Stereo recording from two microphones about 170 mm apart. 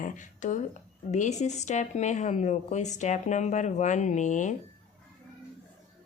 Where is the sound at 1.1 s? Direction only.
45° left (ahead or behind).